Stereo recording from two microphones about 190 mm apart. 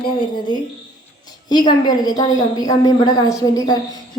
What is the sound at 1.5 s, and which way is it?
A woman's voice, 20° left (ahead or behind).